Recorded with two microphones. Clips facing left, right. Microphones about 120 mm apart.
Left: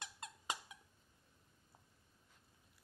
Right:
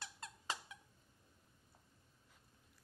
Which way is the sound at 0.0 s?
20° left (ahead or behind).